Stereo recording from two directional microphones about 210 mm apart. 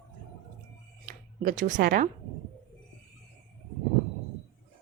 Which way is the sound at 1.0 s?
40° right (ahead or behind).